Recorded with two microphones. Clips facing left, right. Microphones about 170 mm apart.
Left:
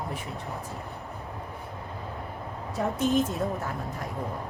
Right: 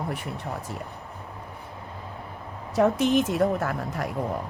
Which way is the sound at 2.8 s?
80° right.